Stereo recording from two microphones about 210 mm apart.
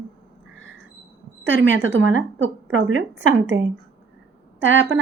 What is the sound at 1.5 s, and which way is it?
A woman's voice, 65° right (ahead or behind).